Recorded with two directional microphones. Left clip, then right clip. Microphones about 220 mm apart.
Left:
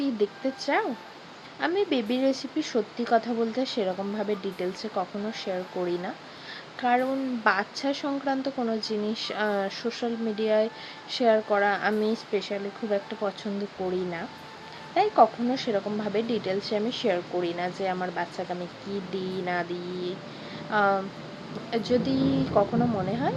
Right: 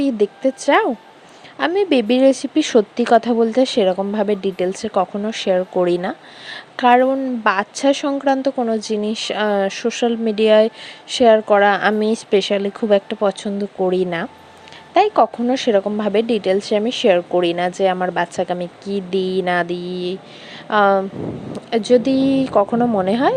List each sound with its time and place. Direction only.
0.0 s speech: 35° right (ahead or behind)